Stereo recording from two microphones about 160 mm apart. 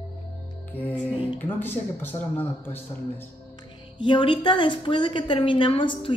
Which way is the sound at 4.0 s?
30° left (ahead or behind).